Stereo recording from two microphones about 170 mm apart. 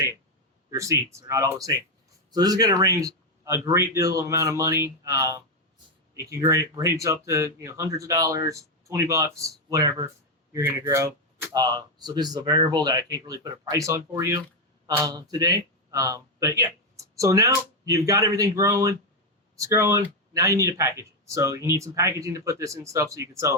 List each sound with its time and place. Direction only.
0.7 s speech: 20° right (ahead or behind)
6.4 s speech: 15° right (ahead or behind)